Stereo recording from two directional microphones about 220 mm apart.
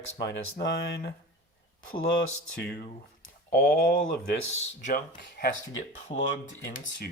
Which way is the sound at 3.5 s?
45° left (ahead or behind).